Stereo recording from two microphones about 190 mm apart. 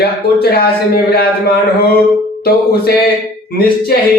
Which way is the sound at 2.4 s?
55° left (ahead or behind).